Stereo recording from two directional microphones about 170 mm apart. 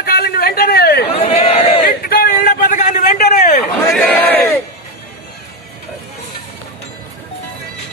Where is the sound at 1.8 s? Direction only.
65° left (ahead or behind).